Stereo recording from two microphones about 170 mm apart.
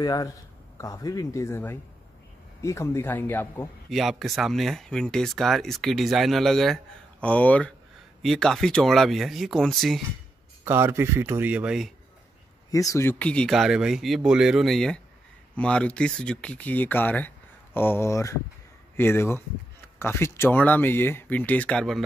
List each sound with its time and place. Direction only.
0.0 s speech: 25° left (ahead or behind)
3.9 s speech: centre (ahead or behind)
10.6 s speech: 15° right (ahead or behind)
12.7 s speech: 20° left (ahead or behind); by 22.0 s 5° left (ahead or behind)